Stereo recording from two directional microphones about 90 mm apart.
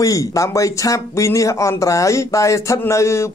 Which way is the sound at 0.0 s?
40° left (ahead or behind).